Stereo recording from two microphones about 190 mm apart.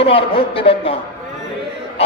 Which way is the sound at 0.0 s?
30° left (ahead or behind).